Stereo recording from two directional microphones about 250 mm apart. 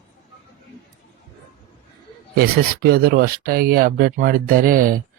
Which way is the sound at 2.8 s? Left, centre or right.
Right.